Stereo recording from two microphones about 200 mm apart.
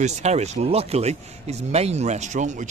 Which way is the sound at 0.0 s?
35° right (ahead or behind).